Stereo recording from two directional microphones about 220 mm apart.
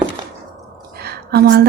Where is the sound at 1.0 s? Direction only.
45° right (ahead or behind).